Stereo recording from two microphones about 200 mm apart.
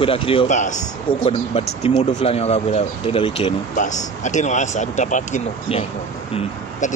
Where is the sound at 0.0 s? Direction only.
25° left (ahead or behind).